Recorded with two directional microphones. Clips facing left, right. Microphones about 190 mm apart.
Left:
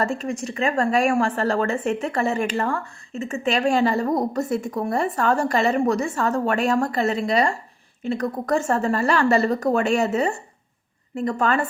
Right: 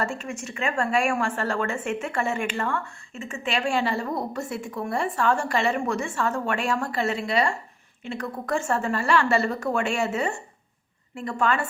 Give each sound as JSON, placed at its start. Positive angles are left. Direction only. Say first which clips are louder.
{"t": 0.0, "sound": "speech", "louder": "left 5 dB", "side_deg": 35}